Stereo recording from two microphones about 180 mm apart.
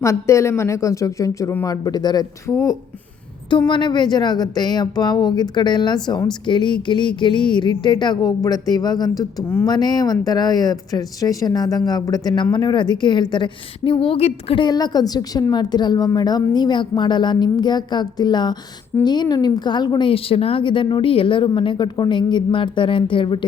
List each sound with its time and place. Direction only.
0.0 s speech: 15° left (ahead or behind)